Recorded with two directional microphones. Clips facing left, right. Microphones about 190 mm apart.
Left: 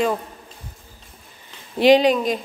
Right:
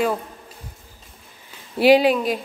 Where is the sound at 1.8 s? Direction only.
5° right (ahead or behind).